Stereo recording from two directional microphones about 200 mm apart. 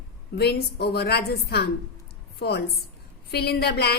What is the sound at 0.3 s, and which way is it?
A woman's voice, 55° left (ahead or behind).